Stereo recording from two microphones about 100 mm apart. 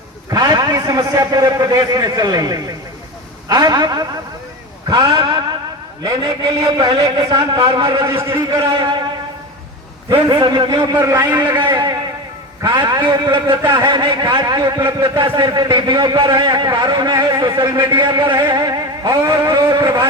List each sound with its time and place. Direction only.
0.3 s a man's voice: 40° right (ahead or behind)
7.0 s speech: 35° right (ahead or behind)
7.6 s a man's voice: 60° right (ahead or behind)
7.9 s speech: 30° right (ahead or behind)
10.2 s a man's voice: 45° right (ahead or behind)
10.9 s a man's voice: 25° right (ahead or behind)
11.5 s a sound: 55° right (ahead or behind)
12.6 s a man's voice: 45° right (ahead or behind)
15.2 s a man's voice: 45° right (ahead or behind)
18.0 s vehicle: 55° right (ahead or behind)